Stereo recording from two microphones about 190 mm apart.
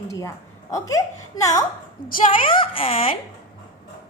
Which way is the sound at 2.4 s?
30° left (ahead or behind).